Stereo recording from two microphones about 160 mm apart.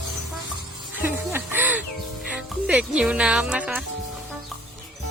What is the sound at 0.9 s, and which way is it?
Music, 15° right (ahead or behind).